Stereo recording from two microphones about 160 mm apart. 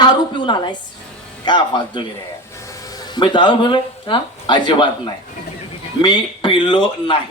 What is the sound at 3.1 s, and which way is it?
A woman's voice, 30° left (ahead or behind).